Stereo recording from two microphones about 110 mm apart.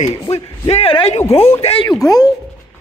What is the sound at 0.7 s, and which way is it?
Speech, 60° left (ahead or behind).